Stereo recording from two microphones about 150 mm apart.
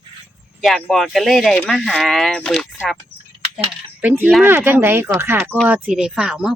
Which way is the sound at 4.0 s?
10° right (ahead or behind).